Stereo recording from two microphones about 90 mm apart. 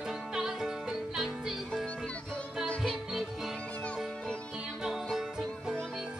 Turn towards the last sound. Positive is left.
turn(degrees=0)  # may be behind; listen again after turning